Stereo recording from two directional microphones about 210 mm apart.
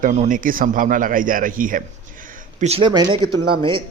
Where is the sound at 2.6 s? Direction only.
25° right (ahead or behind).